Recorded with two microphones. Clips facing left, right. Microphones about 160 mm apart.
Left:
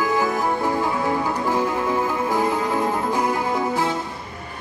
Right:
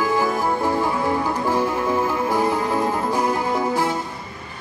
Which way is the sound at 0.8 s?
15° left (ahead or behind).